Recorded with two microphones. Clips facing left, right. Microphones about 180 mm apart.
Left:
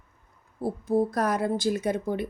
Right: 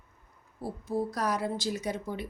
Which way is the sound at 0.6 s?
55° left (ahead or behind).